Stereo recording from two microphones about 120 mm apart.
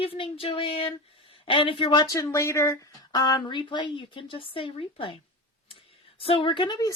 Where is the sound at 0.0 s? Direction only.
50° left (ahead or behind).